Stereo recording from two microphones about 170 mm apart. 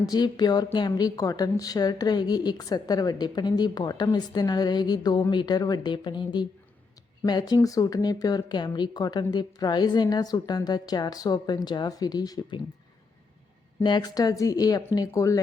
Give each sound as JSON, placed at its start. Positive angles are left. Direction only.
{"t": 0.1, "sound": "speech", "side_deg": 25}
{"t": 13.8, "sound": "speech", "side_deg": 25}